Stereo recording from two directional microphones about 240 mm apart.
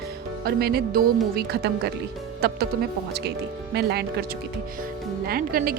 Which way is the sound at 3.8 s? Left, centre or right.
Right.